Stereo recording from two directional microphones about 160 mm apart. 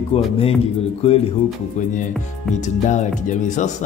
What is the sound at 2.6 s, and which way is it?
Speech, 50° left (ahead or behind).